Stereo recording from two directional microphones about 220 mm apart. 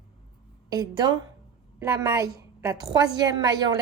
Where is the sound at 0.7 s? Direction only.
20° right (ahead or behind).